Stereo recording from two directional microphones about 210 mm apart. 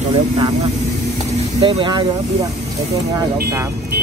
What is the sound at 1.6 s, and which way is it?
Speech, 25° right (ahead or behind).